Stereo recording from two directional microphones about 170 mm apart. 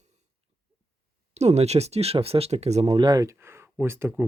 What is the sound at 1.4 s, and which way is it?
Speech, 40° right (ahead or behind).